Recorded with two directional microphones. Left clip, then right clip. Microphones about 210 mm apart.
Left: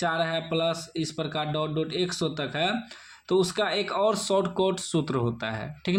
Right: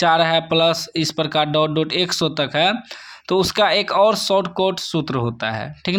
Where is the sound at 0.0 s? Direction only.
35° right (ahead or behind).